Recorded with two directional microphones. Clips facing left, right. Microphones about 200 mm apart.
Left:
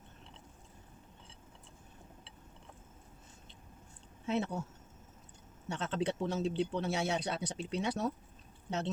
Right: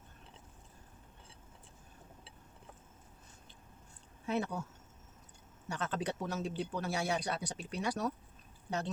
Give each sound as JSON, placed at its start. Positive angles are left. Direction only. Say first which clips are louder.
{"t": 4.3, "sound": "speech", "louder": "left 1 dB", "side_deg": 25}
{"t": 5.6, "sound": "speech", "louder": "left 2 dB", "side_deg": 25}